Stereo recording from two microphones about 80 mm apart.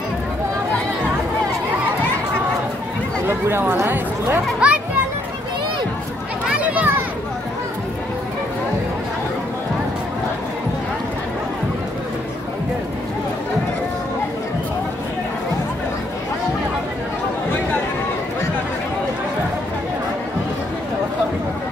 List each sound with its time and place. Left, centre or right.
3.3 s speech: right
4.6 s a child's voice: centre
6.6 s children playing: centre